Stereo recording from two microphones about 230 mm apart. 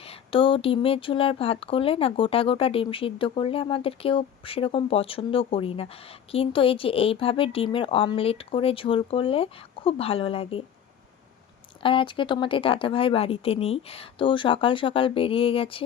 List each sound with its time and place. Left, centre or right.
0.0 s speech: left
11.8 s speech: left